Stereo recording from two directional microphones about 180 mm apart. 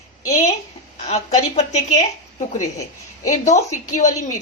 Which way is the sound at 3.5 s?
40° left (ahead or behind).